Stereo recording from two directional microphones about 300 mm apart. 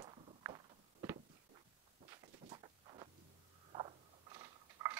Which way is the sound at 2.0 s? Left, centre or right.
Centre.